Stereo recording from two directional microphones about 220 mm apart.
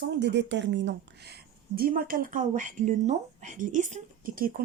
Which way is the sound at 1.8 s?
40° right (ahead or behind).